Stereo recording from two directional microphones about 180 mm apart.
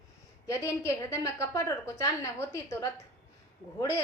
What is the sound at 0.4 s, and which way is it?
A woman's voice, 15° left (ahead or behind).